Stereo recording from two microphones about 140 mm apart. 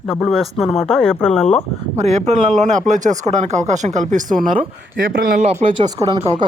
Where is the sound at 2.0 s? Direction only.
50° right (ahead or behind).